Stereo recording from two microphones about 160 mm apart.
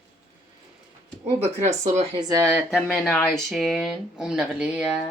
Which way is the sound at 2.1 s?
20° right (ahead or behind).